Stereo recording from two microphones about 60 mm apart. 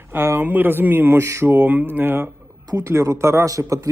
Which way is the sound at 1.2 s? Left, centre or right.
Right.